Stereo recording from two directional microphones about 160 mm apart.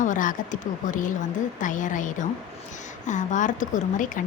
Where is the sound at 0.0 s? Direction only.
55° left (ahead or behind).